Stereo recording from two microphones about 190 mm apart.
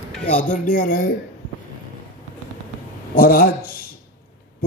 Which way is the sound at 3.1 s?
50° left (ahead or behind).